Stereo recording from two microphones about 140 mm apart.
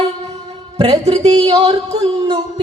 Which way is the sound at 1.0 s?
50° right (ahead or behind).